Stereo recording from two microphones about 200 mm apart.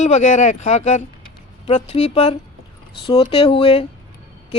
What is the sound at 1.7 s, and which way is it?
Speech, 30° left (ahead or behind).